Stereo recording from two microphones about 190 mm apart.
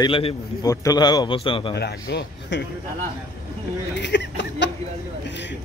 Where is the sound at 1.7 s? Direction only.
60° left (ahead or behind).